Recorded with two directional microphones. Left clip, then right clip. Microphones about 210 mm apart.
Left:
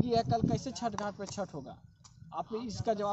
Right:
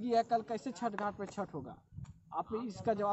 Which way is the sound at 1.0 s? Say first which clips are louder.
Left 1 dB; 20° left (ahead or behind).